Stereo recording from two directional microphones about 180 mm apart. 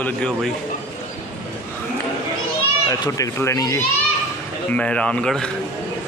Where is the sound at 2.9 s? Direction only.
20° left (ahead or behind).